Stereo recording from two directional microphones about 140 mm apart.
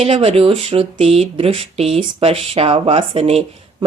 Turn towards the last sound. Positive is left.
turn(degrees=-45)  # may be behind; listen again after turning